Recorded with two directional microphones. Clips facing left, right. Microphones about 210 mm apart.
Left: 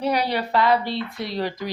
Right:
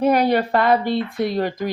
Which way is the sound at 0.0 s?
50° right (ahead or behind).